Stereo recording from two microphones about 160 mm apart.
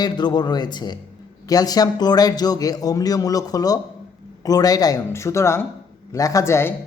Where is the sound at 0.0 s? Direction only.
25° left (ahead or behind).